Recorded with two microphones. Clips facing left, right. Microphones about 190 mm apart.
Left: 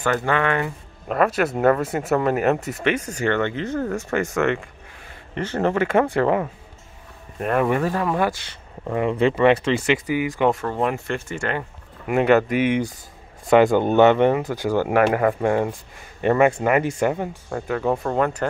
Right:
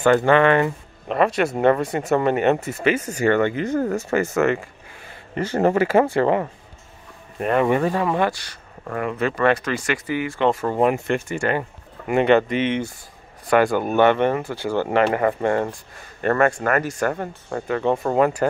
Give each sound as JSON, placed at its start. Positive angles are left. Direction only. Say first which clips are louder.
{"t": 0.0, "sound": "speech", "louder": "right 6 dB", "side_deg": -25}
{"t": 1.0, "sound": "speech", "louder": "right 1 dB", "side_deg": 0}
{"t": 8.8, "sound": "speech", "louder": "left 4 dB", "side_deg": 15}
{"t": 10.5, "sound": "speech", "louder": "right 4 dB", "side_deg": -10}
{"t": 12.1, "sound": "speech", "louder": "even", "side_deg": 5}